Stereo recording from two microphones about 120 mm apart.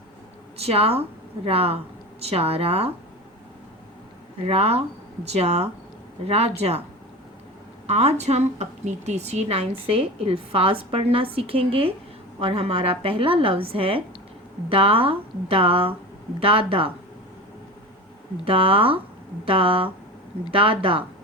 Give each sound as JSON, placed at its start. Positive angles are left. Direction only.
{"t": 0.5, "sound": "speech", "side_deg": -55}
{"t": 4.4, "sound": "speech", "side_deg": -55}
{"t": 7.9, "sound": "a woman's voice", "side_deg": -65}
{"t": 18.4, "sound": "a woman's voice", "side_deg": -50}